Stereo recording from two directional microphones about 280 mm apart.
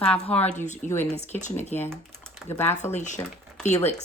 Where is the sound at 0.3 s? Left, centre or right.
Left.